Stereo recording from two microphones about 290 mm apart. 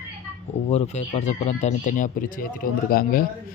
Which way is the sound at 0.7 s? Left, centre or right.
Left.